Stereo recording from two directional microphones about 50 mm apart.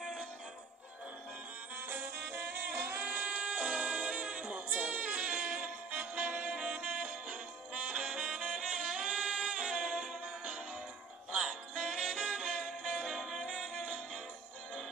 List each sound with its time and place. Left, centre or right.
0.0 s synthetic singing: centre
2.2 s music: right
2.7 s a sound: right
3.6 s music: right
3.9 s music: centre
4.4 s music: right
5.2 s music: centre
7.2 s music: centre
11.3 s music: centre
12.9 s music: centre
13.5 s music: centre